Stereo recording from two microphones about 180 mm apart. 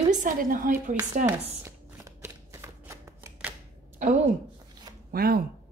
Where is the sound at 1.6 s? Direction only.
15° right (ahead or behind).